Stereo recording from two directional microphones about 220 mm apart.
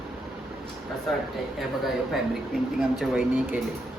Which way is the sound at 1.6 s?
Centre (ahead or behind).